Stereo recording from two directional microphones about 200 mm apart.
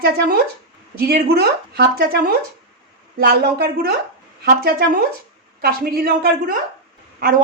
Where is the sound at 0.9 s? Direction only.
55° right (ahead or behind).